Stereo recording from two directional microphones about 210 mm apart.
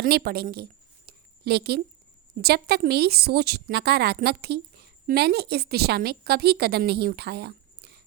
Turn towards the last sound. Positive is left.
turn(degrees=-50)  # may be behind; listen again after turning